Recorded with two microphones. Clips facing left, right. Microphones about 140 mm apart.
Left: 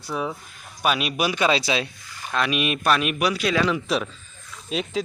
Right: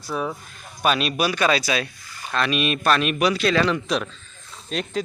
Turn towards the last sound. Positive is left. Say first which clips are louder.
# left 1 dB
turn(degrees=0)  # may be behind; listen again after turning